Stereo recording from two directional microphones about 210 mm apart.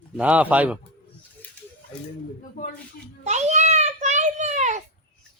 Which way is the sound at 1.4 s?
10° left (ahead or behind).